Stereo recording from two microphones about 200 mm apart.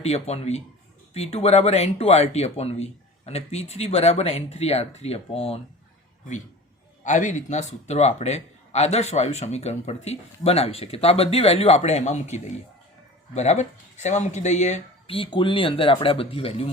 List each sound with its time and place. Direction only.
0.0 s a man's voice: 30° left (ahead or behind)
7.0 s a man's voice: 40° left (ahead or behind)